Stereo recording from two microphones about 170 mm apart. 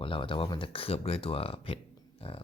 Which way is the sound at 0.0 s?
30° left (ahead or behind).